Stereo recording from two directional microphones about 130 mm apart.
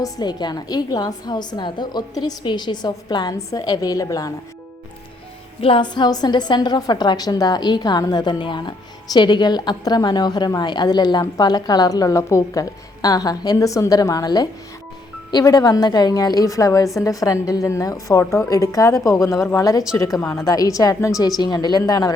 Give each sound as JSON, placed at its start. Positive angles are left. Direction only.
{"t": 0.0, "sound": "a woman's voice", "side_deg": 30}
{"t": 5.5, "sound": "a woman's voice", "side_deg": 45}